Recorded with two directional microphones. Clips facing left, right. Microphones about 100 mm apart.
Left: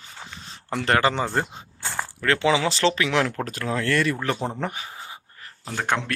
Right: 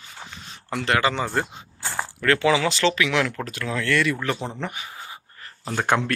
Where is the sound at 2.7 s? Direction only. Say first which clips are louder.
Even; 35° left (ahead or behind).